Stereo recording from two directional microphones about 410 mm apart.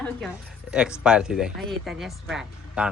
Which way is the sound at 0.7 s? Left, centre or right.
Centre.